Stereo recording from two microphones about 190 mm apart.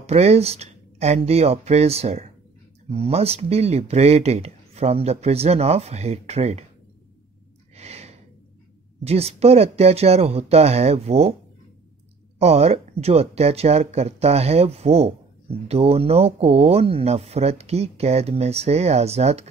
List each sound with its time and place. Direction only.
0.0 s speech: 35° right (ahead or behind)
7.7 s gasp: 35° right (ahead or behind)
9.0 s speech: 35° right (ahead or behind)
12.4 s speech: 35° right (ahead or behind)